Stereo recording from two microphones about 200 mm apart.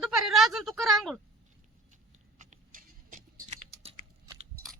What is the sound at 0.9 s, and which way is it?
Speech, centre (ahead or behind).